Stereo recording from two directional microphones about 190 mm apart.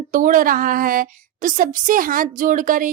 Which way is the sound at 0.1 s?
45° right (ahead or behind).